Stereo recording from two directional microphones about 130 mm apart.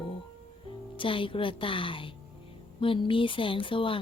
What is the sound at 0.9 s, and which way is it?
Speech, 40° left (ahead or behind).